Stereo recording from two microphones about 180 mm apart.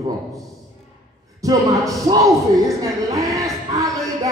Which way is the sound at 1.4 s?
20° right (ahead or behind).